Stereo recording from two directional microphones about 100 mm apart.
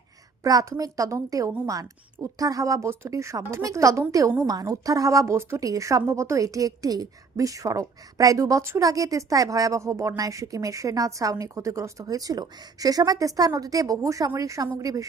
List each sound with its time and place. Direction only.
0.4 s a woman's voice: 35° right (ahead or behind)